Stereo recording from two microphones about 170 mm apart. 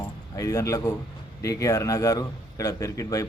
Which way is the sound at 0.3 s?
20° left (ahead or behind).